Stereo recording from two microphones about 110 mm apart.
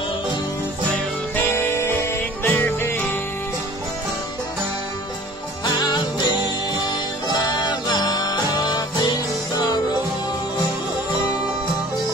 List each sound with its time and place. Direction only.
1.3 s music: 20° left (ahead or behind)
5.8 s music: 40° left (ahead or behind)